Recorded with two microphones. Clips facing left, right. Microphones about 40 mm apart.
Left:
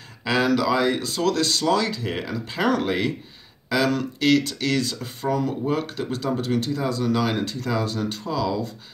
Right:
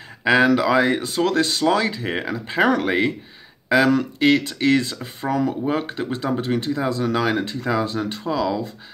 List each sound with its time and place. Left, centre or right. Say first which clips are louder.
0.2 s speech: right 5 dB; right